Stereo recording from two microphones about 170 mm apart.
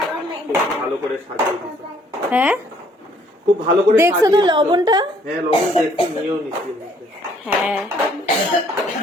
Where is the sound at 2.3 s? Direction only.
10° right (ahead or behind).